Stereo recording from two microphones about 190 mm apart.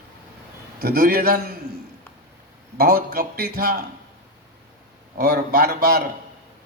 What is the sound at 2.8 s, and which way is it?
Speech, 50° right (ahead or behind).